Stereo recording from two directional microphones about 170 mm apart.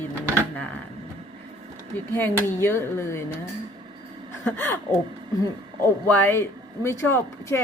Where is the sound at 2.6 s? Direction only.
15° left (ahead or behind).